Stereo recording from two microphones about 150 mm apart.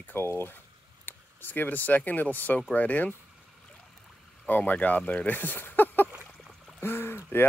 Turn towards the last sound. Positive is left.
turn(degrees=15)  # may be behind; listen again after turning